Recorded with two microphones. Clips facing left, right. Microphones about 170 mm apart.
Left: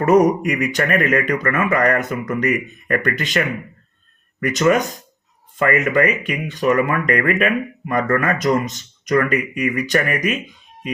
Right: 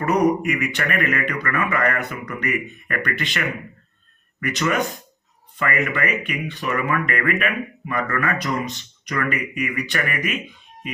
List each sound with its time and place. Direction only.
0.0 s speech: 45° left (ahead or behind)